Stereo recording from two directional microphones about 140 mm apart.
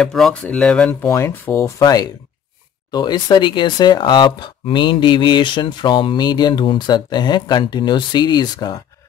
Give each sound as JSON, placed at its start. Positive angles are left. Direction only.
{"t": 0.0, "sound": "speech", "side_deg": 5}
{"t": 1.0, "sound": "speech", "side_deg": 20}
{"t": 2.9, "sound": "mantra", "side_deg": 30}